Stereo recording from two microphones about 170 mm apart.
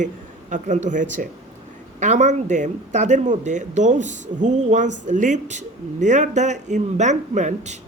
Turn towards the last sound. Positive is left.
turn(degrees=-45)  # may be behind; listen again after turning